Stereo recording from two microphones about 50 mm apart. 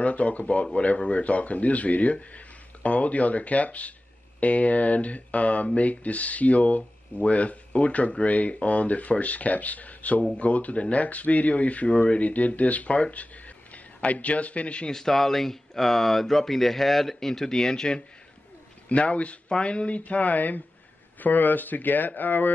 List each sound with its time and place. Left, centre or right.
0.0 s speech: left
14.9 s speech: centre
18.9 s speech: left